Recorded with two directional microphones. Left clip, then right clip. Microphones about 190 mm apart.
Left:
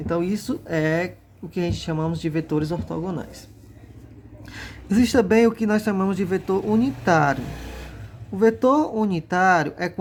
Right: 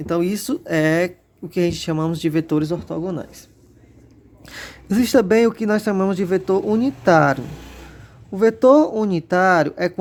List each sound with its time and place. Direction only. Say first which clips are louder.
0.0 s speech: right 3 dB; 50° right (ahead or behind)
4.4 s speech: right 3 dB; 40° right (ahead or behind)
8.4 s speech: right 5 dB; 35° right (ahead or behind)